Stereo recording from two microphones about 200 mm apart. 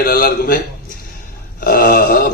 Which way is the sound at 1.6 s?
45° left (ahead or behind).